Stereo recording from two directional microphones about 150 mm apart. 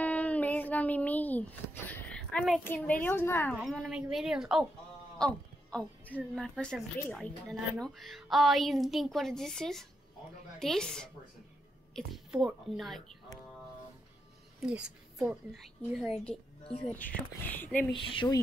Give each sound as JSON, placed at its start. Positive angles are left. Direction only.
{"t": 0.0, "sound": "a sound", "side_deg": 10}
{"t": 2.6, "sound": "a woman's voice", "side_deg": 10}
{"t": 3.6, "sound": "a woman's voice", "side_deg": 0}
{"t": 14.6, "sound": "a woman's voice", "side_deg": -5}
{"t": 16.9, "sound": "a woman's voice", "side_deg": 10}
{"t": 17.9, "sound": "speech", "side_deg": 35}